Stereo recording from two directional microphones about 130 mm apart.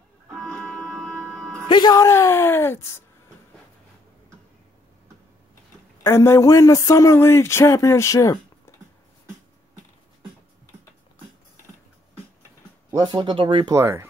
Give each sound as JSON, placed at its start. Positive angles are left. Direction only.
{"t": 0.4, "sound": "music", "side_deg": 5}
{"t": 1.7, "sound": "speech", "side_deg": 30}
{"t": 6.0, "sound": "speech", "side_deg": 20}
{"t": 12.9, "sound": "speech", "side_deg": -35}
{"t": 13.7, "sound": "speech", "side_deg": -20}